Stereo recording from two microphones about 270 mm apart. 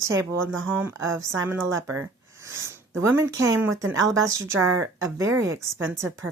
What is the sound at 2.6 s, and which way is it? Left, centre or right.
Speech, centre.